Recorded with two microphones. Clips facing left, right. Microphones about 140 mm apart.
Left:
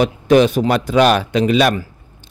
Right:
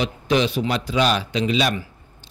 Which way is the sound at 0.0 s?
50° left (ahead or behind).